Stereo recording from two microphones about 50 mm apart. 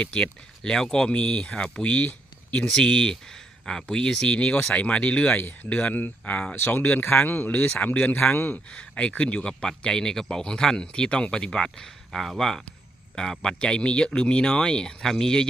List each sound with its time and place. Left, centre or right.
0.0 s speech: left
2.0 s a sound: left
2.6 s speech: centre
6.6 s speech: left; by 15.4 s centre